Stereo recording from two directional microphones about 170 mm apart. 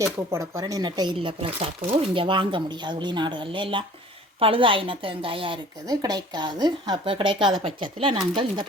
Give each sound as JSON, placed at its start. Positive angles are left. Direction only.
{"t": 0.0, "sound": "speech", "side_deg": -15}